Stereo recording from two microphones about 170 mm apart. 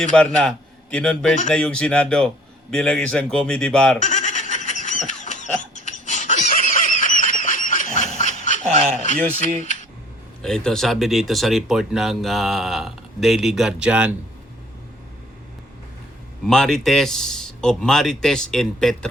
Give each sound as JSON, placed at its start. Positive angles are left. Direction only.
{"t": 0.0, "sound": "a man's voice", "side_deg": 5}
{"t": 4.0, "sound": "laughter", "side_deg": 45}
{"t": 5.7, "sound": "a sound", "side_deg": 45}
{"t": 9.6, "sound": "speech", "side_deg": 45}
{"t": 10.4, "sound": "speech", "side_deg": 5}
{"t": 16.5, "sound": "speech", "side_deg": 5}